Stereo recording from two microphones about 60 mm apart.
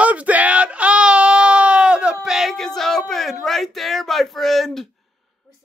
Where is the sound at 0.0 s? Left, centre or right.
Right; by 2.5 s centre.